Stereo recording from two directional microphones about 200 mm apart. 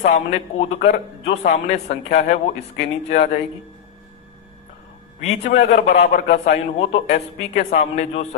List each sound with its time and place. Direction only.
0.0 s a man's voice: 35° left (ahead or behind)
1.7 s speech: 45° left (ahead or behind)
2.1 s a man's voice: 35° left (ahead or behind)
5.2 s a man's voice: 35° left (ahead or behind)